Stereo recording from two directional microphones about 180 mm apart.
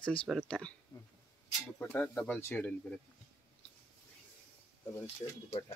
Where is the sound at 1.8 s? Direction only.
10° left (ahead or behind).